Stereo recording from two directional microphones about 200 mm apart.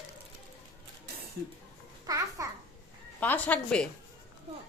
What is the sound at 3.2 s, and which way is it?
Speech, 10° left (ahead or behind).